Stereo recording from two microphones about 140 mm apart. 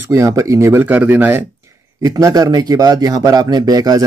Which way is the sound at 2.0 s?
25° right (ahead or behind).